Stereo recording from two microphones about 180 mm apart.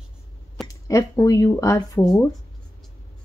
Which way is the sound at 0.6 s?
15° left (ahead or behind).